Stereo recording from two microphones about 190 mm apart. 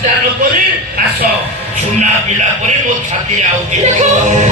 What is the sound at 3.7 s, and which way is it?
Music, 40° right (ahead or behind).